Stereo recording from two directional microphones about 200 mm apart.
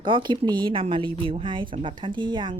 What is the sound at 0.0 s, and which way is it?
Speech, 25° right (ahead or behind).